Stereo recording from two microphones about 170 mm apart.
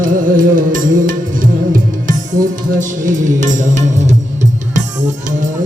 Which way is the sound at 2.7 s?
50° right (ahead or behind).